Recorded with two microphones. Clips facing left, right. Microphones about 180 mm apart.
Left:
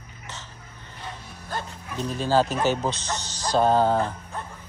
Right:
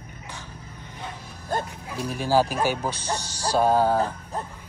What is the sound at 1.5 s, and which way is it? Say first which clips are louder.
Speech: right 5 dB; 50° right (ahead or behind).